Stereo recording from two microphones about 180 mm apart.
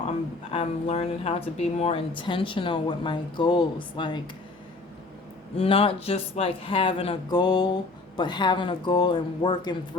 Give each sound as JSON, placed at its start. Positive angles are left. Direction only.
{"t": 0.5, "sound": "speech", "side_deg": 35}
{"t": 5.5, "sound": "speech", "side_deg": 30}